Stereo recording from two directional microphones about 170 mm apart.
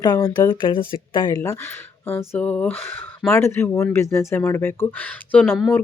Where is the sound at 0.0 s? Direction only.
20° left (ahead or behind).